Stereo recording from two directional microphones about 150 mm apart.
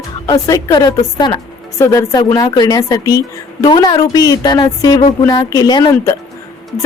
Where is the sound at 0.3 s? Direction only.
25° left (ahead or behind).